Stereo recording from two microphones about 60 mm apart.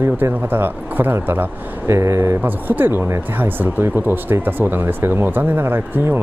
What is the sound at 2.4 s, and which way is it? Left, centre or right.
Speech, right.